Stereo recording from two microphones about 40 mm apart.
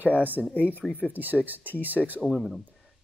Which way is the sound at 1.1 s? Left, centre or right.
Right.